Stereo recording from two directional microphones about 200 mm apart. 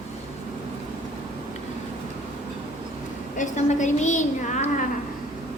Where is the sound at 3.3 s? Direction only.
35° left (ahead or behind).